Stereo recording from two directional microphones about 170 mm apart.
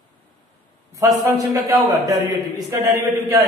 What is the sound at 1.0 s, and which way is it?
A man's voice, 15° right (ahead or behind).